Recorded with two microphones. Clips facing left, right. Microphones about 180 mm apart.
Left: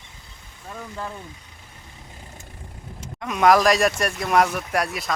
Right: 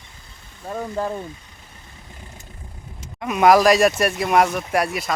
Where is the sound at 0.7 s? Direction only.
40° right (ahead or behind).